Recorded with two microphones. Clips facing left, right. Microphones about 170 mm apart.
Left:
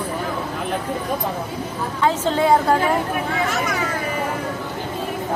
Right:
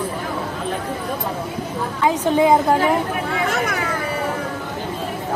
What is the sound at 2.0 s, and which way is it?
Speech, 15° right (ahead or behind).